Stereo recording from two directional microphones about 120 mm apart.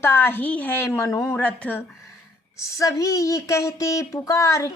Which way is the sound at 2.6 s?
25° left (ahead or behind).